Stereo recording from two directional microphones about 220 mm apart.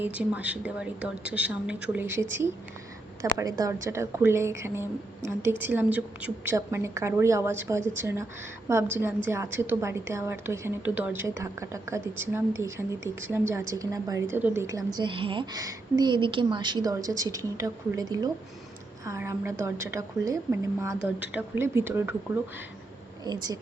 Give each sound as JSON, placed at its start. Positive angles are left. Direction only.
{"t": 0.0, "sound": "a woman's voice", "side_deg": -5}
{"t": 23.2, "sound": "speech", "side_deg": -20}